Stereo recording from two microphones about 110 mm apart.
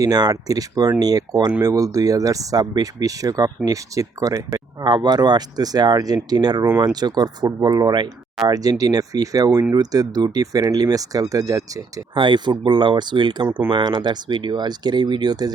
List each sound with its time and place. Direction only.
0.0 s speech: 35° right (ahead or behind)
12.1 s speech: 45° right (ahead or behind)